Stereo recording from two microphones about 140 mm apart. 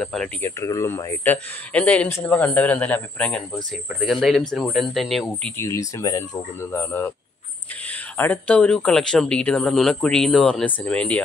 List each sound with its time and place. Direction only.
0.0 s speech: 5° left (ahead or behind)
0.4 s speech: 20° left (ahead or behind); by 5.5 s 5° left (ahead or behind)
5.6 s speech: 20° left (ahead or behind)